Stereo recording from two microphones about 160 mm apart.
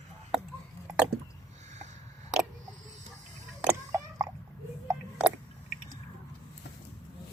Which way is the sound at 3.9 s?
20° right (ahead or behind).